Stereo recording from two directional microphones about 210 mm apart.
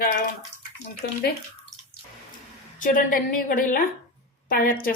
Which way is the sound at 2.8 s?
40° left (ahead or behind).